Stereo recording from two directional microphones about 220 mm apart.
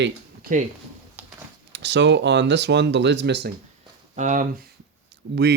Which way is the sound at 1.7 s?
55° right (ahead or behind).